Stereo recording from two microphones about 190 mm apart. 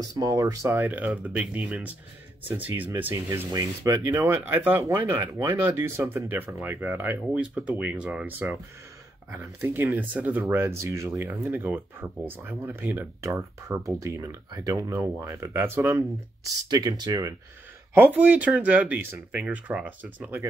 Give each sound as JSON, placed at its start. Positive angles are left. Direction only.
{"t": 0.0, "sound": "speech", "side_deg": -20}
{"t": 9.6, "sound": "speech", "side_deg": -10}